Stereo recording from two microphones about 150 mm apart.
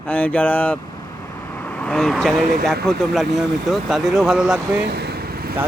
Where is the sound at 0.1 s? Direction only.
10° left (ahead or behind).